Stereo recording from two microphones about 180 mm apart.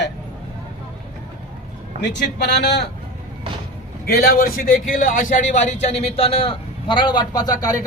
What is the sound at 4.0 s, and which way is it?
A man's voice, 55° left (ahead or behind).